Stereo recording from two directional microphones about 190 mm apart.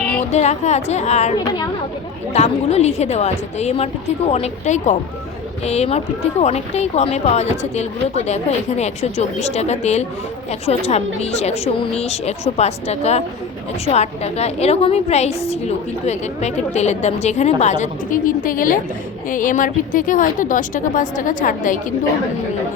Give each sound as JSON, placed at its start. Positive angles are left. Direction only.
{"t": 0.3, "sound": "a woman's voice", "side_deg": 35}
{"t": 2.3, "sound": "a woman's voice", "side_deg": 35}